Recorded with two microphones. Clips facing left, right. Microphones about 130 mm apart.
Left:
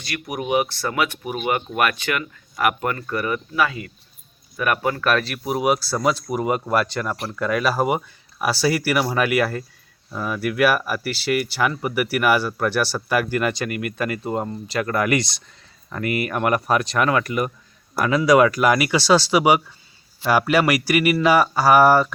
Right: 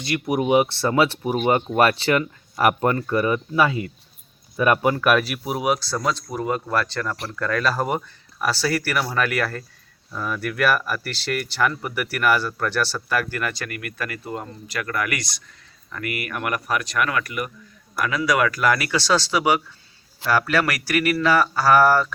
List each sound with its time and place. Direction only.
0.0 s speech: 25° right (ahead or behind)
4.9 s speech: 10° right (ahead or behind)
6.2 s speech: 15° left (ahead or behind)